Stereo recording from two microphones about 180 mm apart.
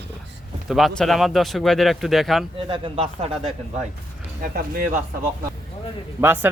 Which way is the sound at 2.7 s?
30° right (ahead or behind).